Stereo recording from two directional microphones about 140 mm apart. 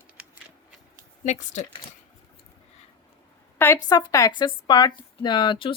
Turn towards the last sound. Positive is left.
turn(degrees=35)  # may be behind; listen again after turning